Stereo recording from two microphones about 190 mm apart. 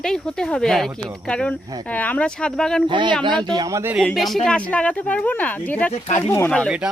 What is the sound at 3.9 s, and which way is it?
Speech, centre (ahead or behind).